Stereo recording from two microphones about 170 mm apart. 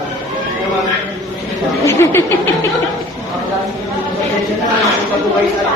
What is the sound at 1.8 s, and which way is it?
Chatter, 15° left (ahead or behind).